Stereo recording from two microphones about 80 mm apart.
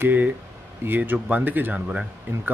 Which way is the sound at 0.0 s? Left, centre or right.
Right.